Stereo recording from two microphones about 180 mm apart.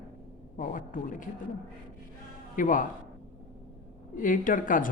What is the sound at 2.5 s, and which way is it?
Speech, 50° left (ahead or behind).